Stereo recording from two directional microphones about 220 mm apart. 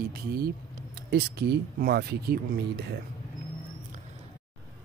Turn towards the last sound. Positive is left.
turn(degrees=-50)  # may be behind; listen again after turning